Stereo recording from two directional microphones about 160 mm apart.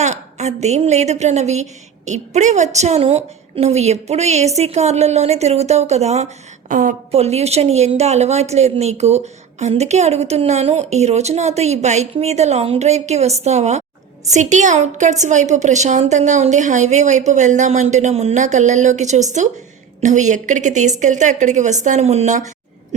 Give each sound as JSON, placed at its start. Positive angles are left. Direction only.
{"t": 0.0, "sound": "a woman's voice", "side_deg": -45}
{"t": 7.1, "sound": "a woman's voice", "side_deg": -40}